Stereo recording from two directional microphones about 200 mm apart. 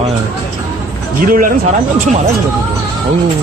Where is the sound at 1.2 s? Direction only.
45° right (ahead or behind).